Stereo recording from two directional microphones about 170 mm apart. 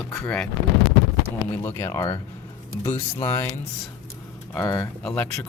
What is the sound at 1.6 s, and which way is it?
Speech, 15° left (ahead or behind).